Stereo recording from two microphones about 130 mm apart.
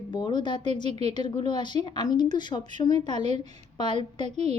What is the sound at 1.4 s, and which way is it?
A woman's voice, 35° left (ahead or behind).